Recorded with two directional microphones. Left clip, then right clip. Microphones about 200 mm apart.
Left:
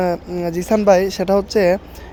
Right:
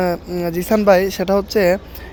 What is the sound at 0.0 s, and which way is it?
Speech, centre (ahead or behind).